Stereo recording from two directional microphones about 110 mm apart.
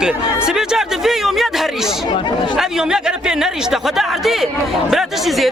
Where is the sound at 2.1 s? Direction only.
45° left (ahead or behind).